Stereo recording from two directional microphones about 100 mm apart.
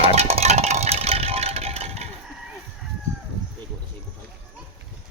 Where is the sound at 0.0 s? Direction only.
85° right.